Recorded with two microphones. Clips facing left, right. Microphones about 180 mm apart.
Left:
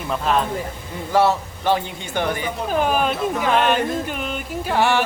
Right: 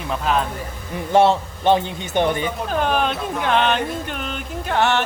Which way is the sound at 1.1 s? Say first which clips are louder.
Right 2 dB; 25° right (ahead or behind).